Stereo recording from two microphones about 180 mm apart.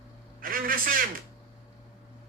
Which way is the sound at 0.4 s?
50° right (ahead or behind).